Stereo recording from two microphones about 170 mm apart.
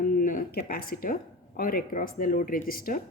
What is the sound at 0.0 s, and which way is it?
Speech, 55° left (ahead or behind).